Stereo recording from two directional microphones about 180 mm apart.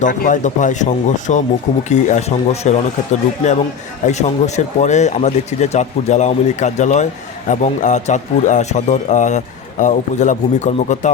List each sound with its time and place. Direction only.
0.0 s a man's voice: 45° left (ahead or behind)